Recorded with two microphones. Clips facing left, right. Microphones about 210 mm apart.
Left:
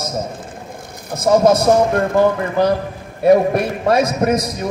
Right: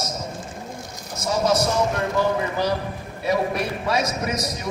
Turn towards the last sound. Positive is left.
turn(degrees=55)  # may be behind; listen again after turning